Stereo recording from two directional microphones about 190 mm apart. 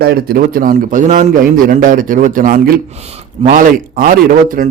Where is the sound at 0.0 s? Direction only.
55° right (ahead or behind).